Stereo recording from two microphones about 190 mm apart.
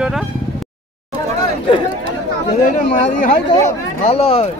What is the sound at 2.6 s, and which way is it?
Speech, 45° left (ahead or behind).